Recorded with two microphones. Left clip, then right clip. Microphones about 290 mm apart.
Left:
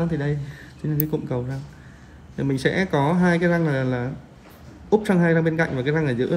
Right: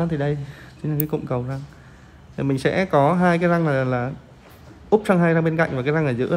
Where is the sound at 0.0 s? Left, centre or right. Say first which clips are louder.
Right 2 dB; right.